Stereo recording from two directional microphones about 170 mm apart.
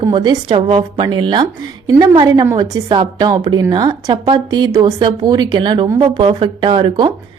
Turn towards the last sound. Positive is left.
turn(degrees=-30)  # may be behind; listen again after turning